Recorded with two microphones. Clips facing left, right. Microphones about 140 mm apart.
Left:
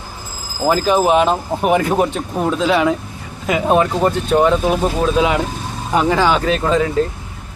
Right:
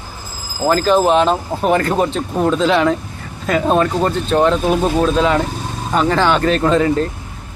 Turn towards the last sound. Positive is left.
turn(degrees=0)  # may be behind; listen again after turning